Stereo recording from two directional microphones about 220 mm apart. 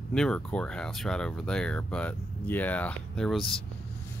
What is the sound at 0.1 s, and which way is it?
Speech, 5° left (ahead or behind).